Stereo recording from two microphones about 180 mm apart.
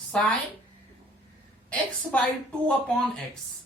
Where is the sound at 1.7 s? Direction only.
5° left (ahead or behind).